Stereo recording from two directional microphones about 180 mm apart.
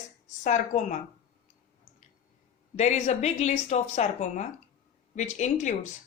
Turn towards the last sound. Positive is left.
turn(degrees=45)  # may be behind; listen again after turning